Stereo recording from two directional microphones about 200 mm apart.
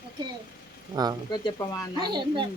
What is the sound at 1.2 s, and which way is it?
Speech, 20° left (ahead or behind).